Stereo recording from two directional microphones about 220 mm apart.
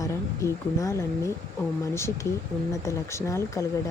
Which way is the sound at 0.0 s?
15° left (ahead or behind).